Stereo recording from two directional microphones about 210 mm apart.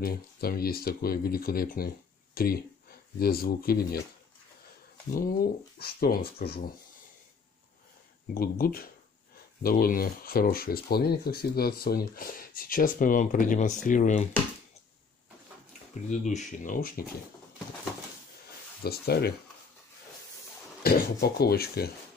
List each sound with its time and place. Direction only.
0.0 s speech: 45° left (ahead or behind)
5.1 s speech: 45° left (ahead or behind)
8.4 s speech: 45° left (ahead or behind)
16.1 s speech: 35° left (ahead or behind)
18.8 s speech: 50° left (ahead or behind)
20.8 s speech: 45° left (ahead or behind)